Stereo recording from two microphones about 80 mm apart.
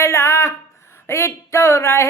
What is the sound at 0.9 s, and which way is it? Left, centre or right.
Speech, left.